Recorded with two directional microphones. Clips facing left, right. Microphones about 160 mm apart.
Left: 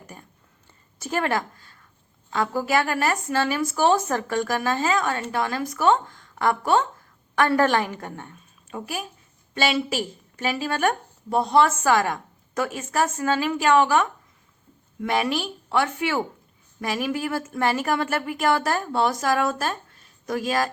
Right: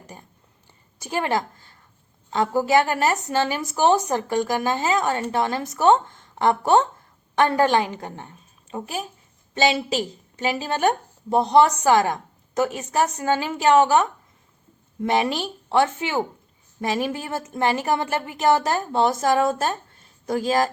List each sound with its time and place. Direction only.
0.1 s a woman's voice: 20° right (ahead or behind)